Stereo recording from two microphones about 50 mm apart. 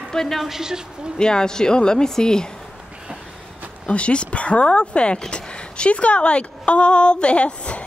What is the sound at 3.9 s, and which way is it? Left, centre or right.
A woman's voice, left.